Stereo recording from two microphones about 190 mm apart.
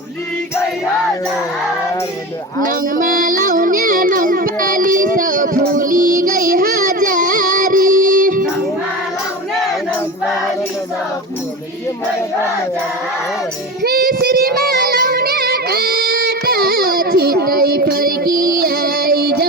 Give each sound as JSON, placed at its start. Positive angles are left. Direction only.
{"t": 2.6, "sound": "child singing", "side_deg": -45}
{"t": 13.8, "sound": "child singing", "side_deg": -50}